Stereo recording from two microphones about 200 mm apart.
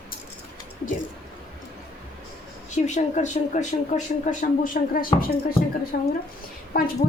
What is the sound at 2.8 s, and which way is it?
A woman's voice, 35° left (ahead or behind).